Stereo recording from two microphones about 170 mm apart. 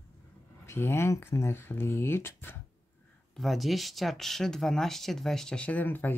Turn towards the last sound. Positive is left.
turn(degrees=10)  # may be behind; listen again after turning